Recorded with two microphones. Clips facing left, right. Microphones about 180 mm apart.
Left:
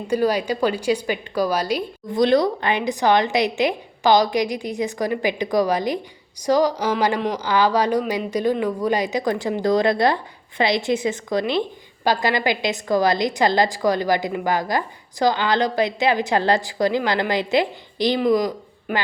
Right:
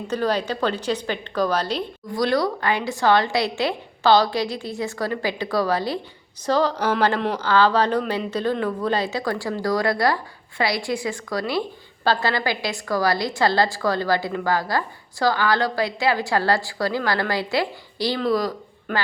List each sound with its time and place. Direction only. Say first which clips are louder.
0.1 s a woman's voice: left 3 dB; 10° left (ahead or behind)
2.1 s a woman's voice: left 4 dB; 20° left (ahead or behind)